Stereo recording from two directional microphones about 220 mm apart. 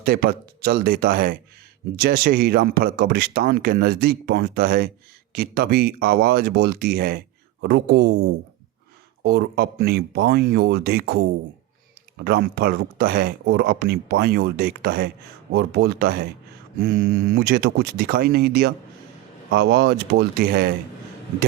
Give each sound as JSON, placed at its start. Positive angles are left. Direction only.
{"t": 0.0, "sound": "speech", "side_deg": -45}
{"t": 9.2, "sound": "speech", "side_deg": -50}